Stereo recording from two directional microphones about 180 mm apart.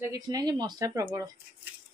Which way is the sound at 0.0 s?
20° right (ahead or behind).